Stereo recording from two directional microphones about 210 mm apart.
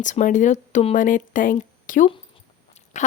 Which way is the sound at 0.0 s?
35° left (ahead or behind).